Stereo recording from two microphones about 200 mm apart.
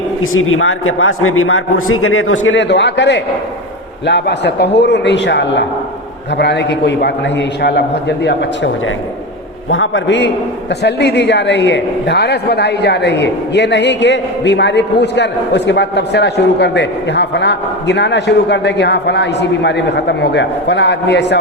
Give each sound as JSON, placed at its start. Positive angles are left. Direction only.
{"t": 0.2, "sound": "a man's voice", "side_deg": 90}
{"t": 9.6, "sound": "a man's voice", "side_deg": 75}